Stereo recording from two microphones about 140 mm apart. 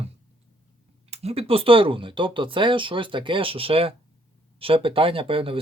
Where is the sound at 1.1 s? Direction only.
45° right (ahead or behind).